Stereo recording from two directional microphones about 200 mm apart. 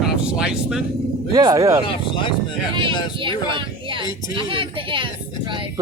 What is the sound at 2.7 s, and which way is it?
Speech, 25° right (ahead or behind).